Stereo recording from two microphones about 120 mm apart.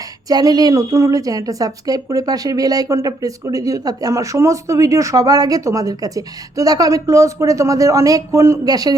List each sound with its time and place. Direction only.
0.3 s a woman's voice: 30° right (ahead or behind)